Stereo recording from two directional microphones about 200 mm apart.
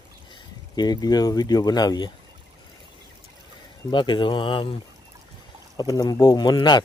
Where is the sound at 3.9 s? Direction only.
25° left (ahead or behind).